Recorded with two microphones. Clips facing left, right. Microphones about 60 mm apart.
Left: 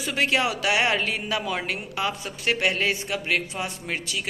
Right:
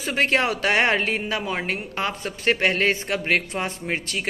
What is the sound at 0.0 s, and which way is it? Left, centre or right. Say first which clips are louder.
A man's voice: right 2 dB; right.